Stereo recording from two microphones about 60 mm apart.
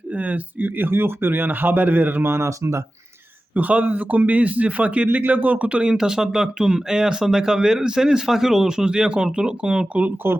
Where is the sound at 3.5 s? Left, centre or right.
Right.